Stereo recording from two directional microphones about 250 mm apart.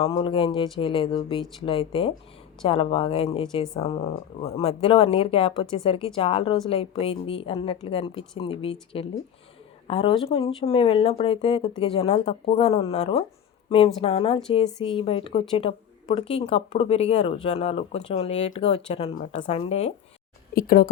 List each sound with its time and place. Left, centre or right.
0.0 s speech: centre
20.6 s speech: left